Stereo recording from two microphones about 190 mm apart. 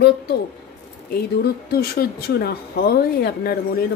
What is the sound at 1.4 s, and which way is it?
Speech, 55° left (ahead or behind).